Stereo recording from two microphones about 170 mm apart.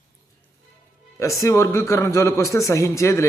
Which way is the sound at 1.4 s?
15° left (ahead or behind).